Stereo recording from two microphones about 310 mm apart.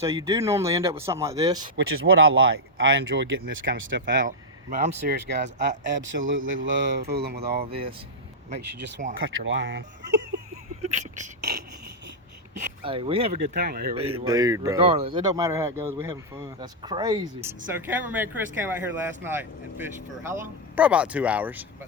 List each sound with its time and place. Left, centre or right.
0.0 s speech: centre
1.7 s speech: right
12.8 s speech: centre
13.7 s speech: right
14.3 s speech: centre